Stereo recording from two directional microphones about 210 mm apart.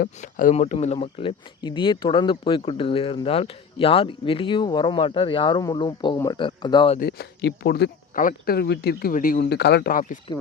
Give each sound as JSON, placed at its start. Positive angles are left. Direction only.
{"t": 0.0, "sound": "speech", "side_deg": 40}
{"t": 7.0, "sound": "speech", "side_deg": 50}